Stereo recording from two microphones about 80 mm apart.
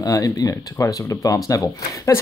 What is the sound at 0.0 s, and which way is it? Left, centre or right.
Speech, left.